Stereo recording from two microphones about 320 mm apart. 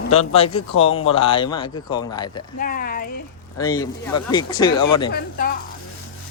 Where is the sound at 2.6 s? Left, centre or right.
Left.